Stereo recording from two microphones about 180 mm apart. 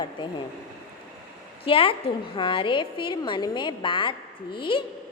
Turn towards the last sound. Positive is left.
turn(degrees=30)  # may be behind; listen again after turning